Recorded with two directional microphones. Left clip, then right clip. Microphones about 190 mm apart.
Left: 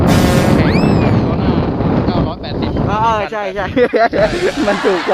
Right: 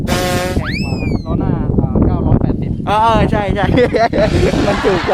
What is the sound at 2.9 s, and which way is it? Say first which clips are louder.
Speech: right 4 dB; 40° right (ahead or behind).